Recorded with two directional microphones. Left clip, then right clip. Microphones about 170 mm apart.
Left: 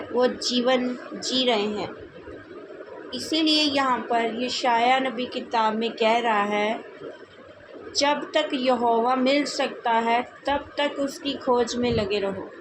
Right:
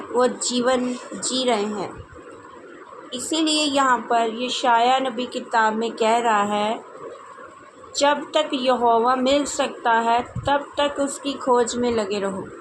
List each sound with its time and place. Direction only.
0.4 s speech: 25° right (ahead or behind)
3.1 s speech: 30° right (ahead or behind)
7.9 s speech: 30° right (ahead or behind)